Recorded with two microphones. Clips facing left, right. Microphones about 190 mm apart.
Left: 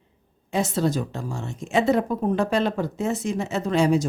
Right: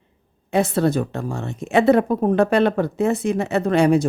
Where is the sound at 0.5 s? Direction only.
60° right (ahead or behind).